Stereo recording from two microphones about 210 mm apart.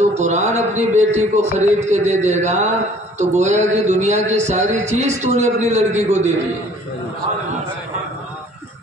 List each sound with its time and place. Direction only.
0.1 s a man's voice: 35° right (ahead or behind)